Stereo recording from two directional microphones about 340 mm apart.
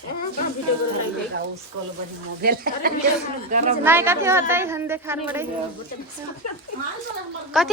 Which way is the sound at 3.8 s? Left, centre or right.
Centre.